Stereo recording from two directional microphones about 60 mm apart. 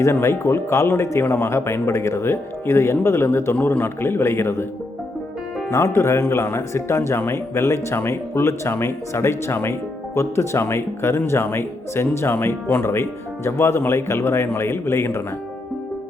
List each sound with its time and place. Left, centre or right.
0.0 s speech: left
5.7 s speech: left